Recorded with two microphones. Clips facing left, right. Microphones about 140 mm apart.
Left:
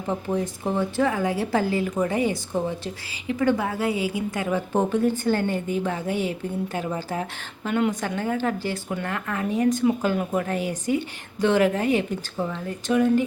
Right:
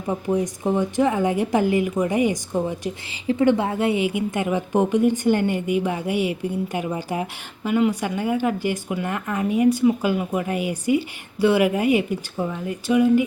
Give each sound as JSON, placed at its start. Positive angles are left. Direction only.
{"t": 0.1, "sound": "a woman's voice", "side_deg": -15}